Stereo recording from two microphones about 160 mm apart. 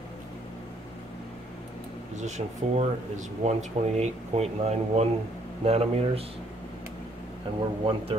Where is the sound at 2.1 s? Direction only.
45° right (ahead or behind).